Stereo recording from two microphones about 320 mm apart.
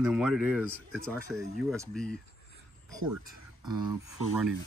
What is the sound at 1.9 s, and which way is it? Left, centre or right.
Speech, centre.